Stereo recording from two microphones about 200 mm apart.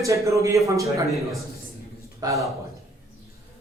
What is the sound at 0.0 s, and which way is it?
A woman's voice, 15° right (ahead or behind).